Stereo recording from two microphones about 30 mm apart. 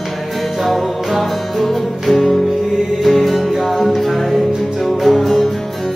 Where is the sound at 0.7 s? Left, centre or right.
Centre.